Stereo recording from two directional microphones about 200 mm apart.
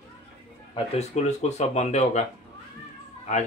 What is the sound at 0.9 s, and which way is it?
A man's voice, 35° left (ahead or behind).